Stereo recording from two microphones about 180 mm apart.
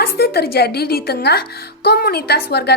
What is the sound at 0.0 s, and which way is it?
A woman's voice, 60° left (ahead or behind).